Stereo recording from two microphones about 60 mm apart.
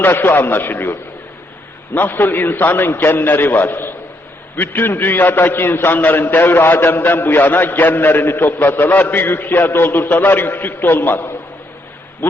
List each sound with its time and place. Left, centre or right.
0.0 s a man's voice: left
2.0 s a man's voice: left